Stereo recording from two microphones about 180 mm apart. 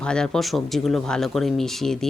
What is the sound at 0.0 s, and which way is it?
Speech, 5° left (ahead or behind).